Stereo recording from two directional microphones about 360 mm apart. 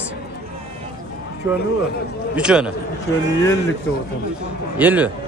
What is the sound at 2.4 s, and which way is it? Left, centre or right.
Speech, centre.